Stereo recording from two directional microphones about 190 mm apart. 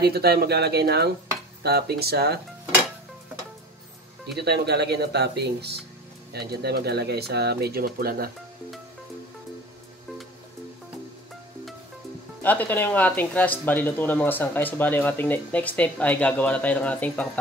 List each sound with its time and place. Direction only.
0.0 s speech: 55° right (ahead or behind)
4.4 s speech: 60° right (ahead or behind)
12.4 s speech: 10° left (ahead or behind)